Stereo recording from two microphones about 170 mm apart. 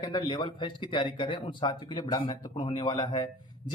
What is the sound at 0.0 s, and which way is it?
Speech, 25° left (ahead or behind).